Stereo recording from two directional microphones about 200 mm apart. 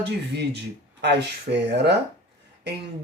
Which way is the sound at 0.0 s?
55° right (ahead or behind).